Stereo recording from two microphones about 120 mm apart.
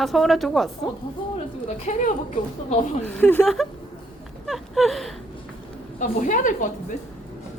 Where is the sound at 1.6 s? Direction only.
90° left.